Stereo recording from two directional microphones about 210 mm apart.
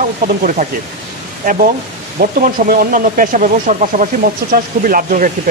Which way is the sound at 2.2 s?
45° right (ahead or behind).